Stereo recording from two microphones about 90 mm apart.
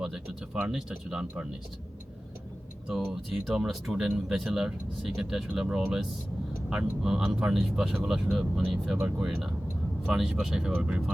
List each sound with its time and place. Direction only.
0.0 s speech: 5° right (ahead or behind)
2.9 s speech: centre (ahead or behind)
9.0 s speech: 15° right (ahead or behind)
9.2 s speech: 5° right (ahead or behind)